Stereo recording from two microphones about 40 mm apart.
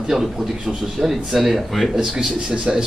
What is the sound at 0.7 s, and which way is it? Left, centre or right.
Speech, centre.